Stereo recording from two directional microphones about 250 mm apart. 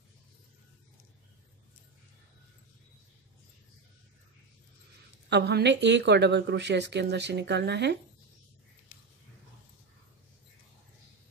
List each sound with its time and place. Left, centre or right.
5.3 s speech: right